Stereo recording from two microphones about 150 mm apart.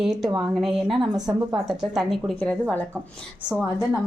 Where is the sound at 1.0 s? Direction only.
25° right (ahead or behind).